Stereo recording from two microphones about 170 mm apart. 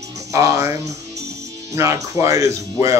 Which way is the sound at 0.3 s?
20° right (ahead or behind).